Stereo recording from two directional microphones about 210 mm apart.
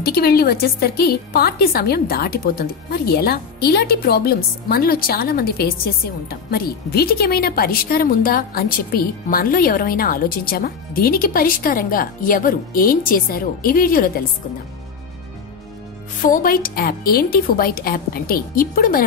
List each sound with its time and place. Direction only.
0.0 s a woman's voice: 50° left (ahead or behind)
16.2 s a woman's voice: 40° left (ahead or behind)